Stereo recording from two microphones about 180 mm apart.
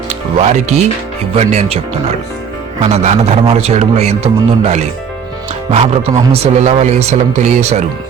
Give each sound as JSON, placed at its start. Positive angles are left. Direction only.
{"t": 0.1, "sound": "speech", "side_deg": -40}
{"t": 2.8, "sound": "speech", "side_deg": -40}